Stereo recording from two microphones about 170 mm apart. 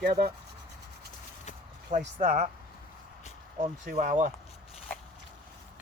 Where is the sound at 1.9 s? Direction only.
45° right (ahead or behind).